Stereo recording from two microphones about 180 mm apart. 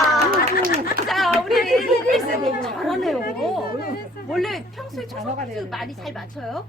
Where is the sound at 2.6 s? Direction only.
Centre (ahead or behind).